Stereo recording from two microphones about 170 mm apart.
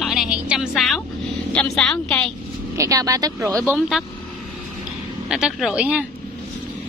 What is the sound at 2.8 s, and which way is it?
Speech, 20° right (ahead or behind).